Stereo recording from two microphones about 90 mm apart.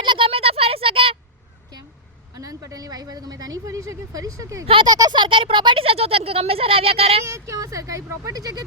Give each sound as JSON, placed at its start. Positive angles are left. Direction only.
{"t": 0.0, "sound": "a sound", "side_deg": -70}
{"t": 2.4, "sound": "a woman's voice", "side_deg": -40}
{"t": 4.6, "sound": "speech", "side_deg": -80}
{"t": 4.9, "sound": "speech", "side_deg": -40}
{"t": 5.1, "sound": "speech", "side_deg": -65}
{"t": 7.3, "sound": "speech", "side_deg": -35}